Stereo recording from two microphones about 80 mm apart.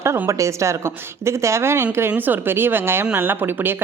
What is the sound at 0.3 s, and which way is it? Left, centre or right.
A woman's voice, right.